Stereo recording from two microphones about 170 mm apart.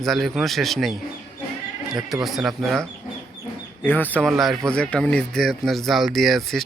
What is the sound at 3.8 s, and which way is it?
Speech, 10° left (ahead or behind).